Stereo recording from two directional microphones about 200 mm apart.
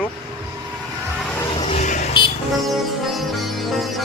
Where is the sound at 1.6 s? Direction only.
30° left (ahead or behind).